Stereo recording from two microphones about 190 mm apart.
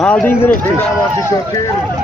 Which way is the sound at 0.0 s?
5° left (ahead or behind).